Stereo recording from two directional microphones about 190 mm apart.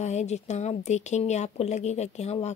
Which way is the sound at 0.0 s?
35° left (ahead or behind).